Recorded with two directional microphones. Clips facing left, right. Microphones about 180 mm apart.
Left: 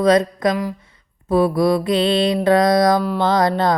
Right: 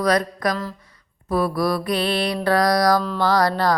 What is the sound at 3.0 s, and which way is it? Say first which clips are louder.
Speech: left 4 dB; 10° left (ahead or behind).